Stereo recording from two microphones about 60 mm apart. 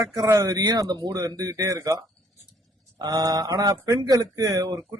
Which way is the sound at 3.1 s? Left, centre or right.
Right.